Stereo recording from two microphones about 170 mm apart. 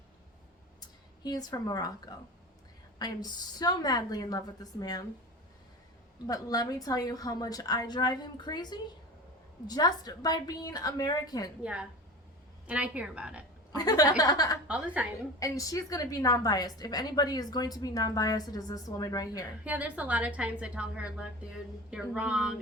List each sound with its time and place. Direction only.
1.2 s a woman's voice: 20° left (ahead or behind)
6.2 s a woman's voice: 20° left (ahead or behind)
11.6 s a woman's voice: 5° right (ahead or behind)
13.7 s a woman's voice: 20° left (ahead or behind)
14.7 s a woman's voice: 10° right (ahead or behind)
15.4 s a woman's voice: 20° left (ahead or behind)
19.6 s a woman's voice: 10° right (ahead or behind)